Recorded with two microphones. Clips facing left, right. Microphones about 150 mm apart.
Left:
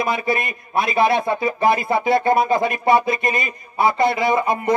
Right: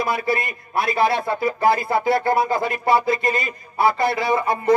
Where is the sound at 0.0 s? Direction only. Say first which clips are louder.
Left 1 dB; 20° left (ahead or behind).